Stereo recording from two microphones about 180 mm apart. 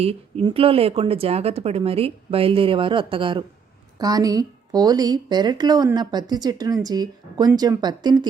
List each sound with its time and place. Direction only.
0.4 s a woman's voice: 30° right (ahead or behind)